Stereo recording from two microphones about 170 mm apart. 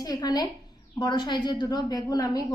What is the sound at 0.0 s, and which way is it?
A woman's voice, 20° left (ahead or behind).